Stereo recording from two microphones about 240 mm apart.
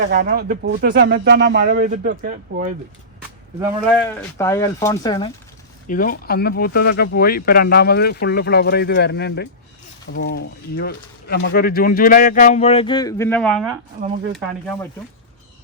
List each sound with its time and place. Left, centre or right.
0.1 s speech: right
3.8 s speech: centre
5.9 s speech: left; by 14.8 s centre